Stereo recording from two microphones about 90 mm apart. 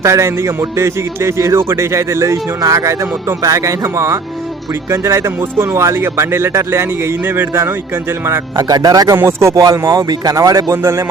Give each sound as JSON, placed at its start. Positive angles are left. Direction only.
{"t": 0.0, "sound": "a man's voice", "side_deg": -35}
{"t": 8.5, "sound": "speech", "side_deg": -45}
{"t": 9.1, "sound": "a man's voice", "side_deg": -30}
{"t": 9.9, "sound": "a man's voice", "side_deg": -45}